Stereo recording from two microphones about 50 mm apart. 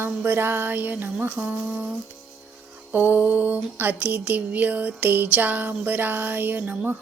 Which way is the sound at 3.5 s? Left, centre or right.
Right.